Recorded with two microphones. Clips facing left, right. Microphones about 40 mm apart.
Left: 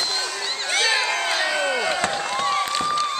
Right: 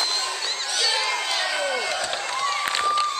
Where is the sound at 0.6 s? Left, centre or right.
Left.